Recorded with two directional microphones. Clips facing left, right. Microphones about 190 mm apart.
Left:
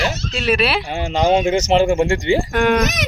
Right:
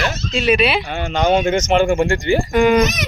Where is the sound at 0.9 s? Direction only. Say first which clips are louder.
Even; 30° left (ahead or behind).